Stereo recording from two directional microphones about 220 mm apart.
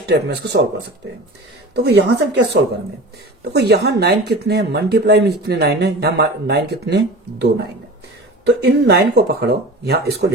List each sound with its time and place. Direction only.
0.0 s speech: 50° right (ahead or behind)
1.8 s speech: 50° right (ahead or behind)